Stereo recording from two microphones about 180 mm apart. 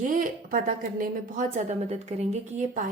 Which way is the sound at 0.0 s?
50° right (ahead or behind).